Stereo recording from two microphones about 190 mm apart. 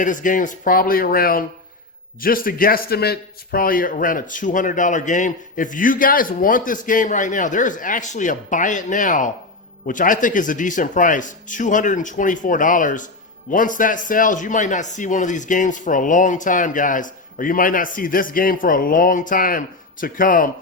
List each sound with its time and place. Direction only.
0.0 s speech: 45° left (ahead or behind)